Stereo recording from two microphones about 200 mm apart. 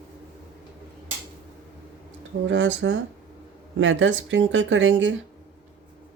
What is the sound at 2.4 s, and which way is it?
Speech, 65° right (ahead or behind).